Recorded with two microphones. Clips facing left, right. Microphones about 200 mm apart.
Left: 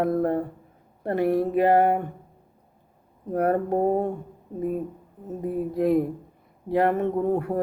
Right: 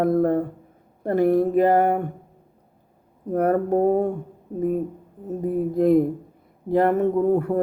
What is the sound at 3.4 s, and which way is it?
Speech, 45° right (ahead or behind).